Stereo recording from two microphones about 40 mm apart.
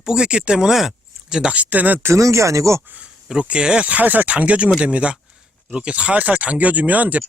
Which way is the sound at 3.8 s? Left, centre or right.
Right.